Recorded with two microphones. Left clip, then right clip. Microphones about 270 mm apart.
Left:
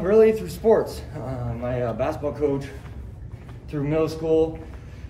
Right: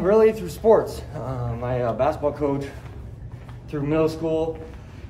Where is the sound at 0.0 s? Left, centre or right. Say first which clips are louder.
Even; centre.